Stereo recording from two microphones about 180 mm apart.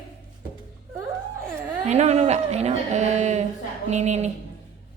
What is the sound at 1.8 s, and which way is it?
Speech, 40° right (ahead or behind).